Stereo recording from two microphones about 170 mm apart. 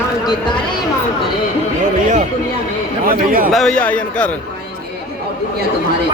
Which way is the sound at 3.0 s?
55° right (ahead or behind).